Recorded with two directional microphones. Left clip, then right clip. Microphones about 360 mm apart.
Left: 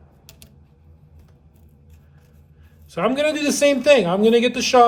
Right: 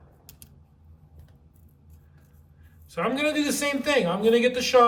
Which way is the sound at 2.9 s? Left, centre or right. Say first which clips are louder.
Left 6 dB; centre.